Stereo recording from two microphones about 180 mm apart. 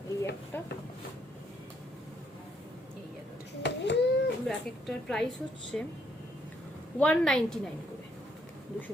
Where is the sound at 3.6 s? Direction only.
75° left (ahead or behind).